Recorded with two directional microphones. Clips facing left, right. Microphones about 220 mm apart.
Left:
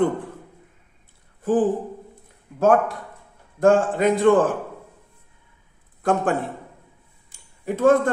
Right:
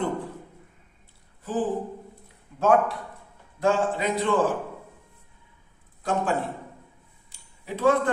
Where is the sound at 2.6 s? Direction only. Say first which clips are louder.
Left 3 dB; 50° left (ahead or behind).